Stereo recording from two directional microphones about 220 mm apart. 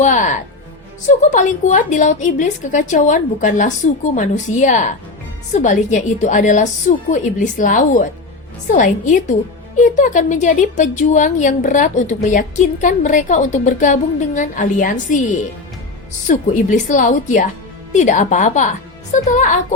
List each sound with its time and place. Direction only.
0.0 s a woman's voice: 35° left (ahead or behind)
16.2 s a woman's voice: 35° left (ahead or behind)